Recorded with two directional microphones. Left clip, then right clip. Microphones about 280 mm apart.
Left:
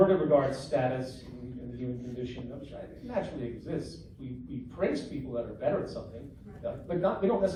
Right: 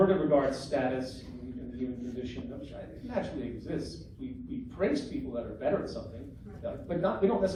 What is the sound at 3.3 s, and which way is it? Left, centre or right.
Speech, left.